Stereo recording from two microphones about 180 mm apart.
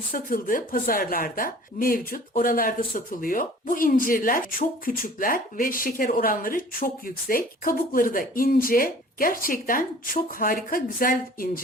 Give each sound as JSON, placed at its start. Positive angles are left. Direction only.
{"t": 0.1, "sound": "a woman's voice", "side_deg": 50}